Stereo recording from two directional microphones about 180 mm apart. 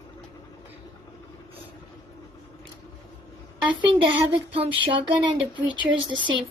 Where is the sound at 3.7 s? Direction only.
25° right (ahead or behind).